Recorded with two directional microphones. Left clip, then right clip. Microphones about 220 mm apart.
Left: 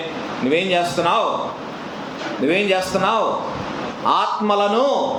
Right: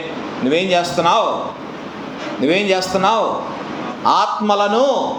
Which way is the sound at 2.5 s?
15° right (ahead or behind).